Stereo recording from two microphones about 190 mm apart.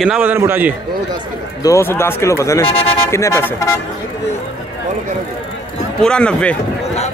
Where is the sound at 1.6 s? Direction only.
15° left (ahead or behind).